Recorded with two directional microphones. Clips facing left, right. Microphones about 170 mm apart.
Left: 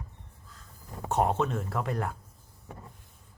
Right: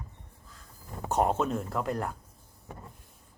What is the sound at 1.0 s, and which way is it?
Speech, centre (ahead or behind).